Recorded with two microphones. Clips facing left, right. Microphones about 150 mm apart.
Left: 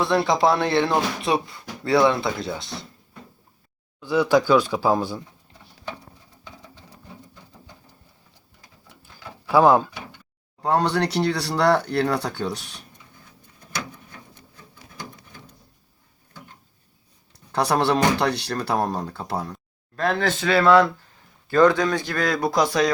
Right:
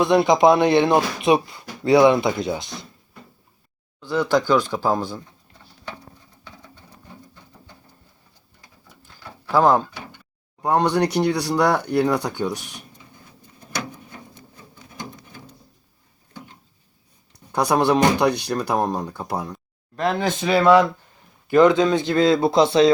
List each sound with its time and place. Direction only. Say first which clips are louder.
0.0 s speech: right 4 dB; 20° right (ahead or behind)
4.0 s speech: left 1 dB; 10° left (ahead or behind)
9.1 s a sound: left 1 dB; 10° left (ahead or behind)
10.6 s speech: right 2 dB; 15° right (ahead or behind)
17.5 s speech: right 2 dB; 15° right (ahead or behind)